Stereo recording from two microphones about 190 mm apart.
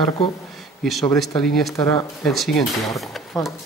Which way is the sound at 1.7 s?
15° left (ahead or behind).